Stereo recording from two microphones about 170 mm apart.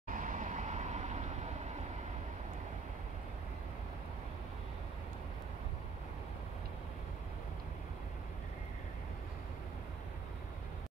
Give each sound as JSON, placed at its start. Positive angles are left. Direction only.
{"t": 0.1, "sound": "vehicle", "side_deg": -50}